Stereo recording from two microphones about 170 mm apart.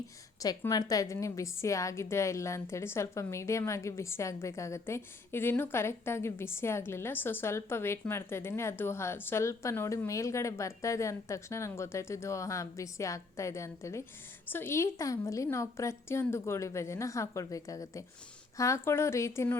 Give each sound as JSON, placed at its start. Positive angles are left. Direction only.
{"t": 0.3, "sound": "a woman's voice", "side_deg": 20}